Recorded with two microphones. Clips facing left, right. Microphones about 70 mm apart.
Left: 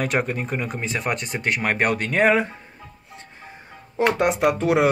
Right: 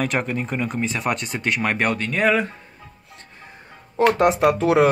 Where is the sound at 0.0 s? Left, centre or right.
Centre.